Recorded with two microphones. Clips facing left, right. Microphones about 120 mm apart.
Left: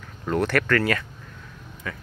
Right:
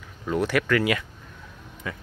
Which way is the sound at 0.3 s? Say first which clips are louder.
Left 1 dB; 5° right (ahead or behind).